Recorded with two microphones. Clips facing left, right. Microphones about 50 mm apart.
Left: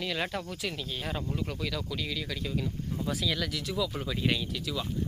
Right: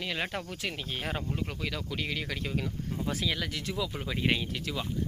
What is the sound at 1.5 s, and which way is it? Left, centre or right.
Speech, right.